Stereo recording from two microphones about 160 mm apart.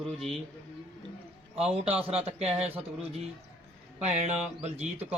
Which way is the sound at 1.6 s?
40° right (ahead or behind).